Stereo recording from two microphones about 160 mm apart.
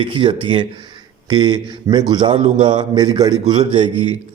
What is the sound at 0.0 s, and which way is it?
A man's voice, 30° right (ahead or behind).